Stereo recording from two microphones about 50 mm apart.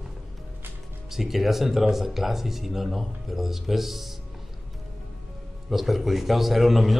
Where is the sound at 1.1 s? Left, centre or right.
Centre.